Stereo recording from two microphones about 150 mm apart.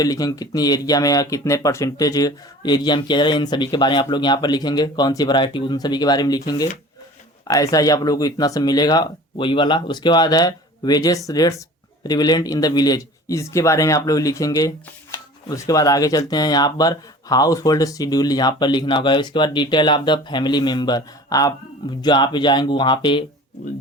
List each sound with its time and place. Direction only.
0.0 s speech: 25° left (ahead or behind)